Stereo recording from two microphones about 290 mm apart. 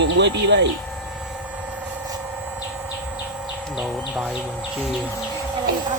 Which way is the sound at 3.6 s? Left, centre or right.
Centre.